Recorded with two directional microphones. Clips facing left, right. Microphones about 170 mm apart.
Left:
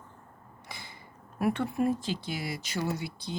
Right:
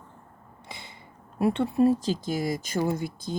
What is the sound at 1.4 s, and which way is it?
Speech, 25° right (ahead or behind).